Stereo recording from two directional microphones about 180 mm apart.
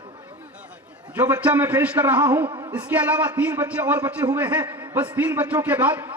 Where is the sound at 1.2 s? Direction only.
10° right (ahead or behind).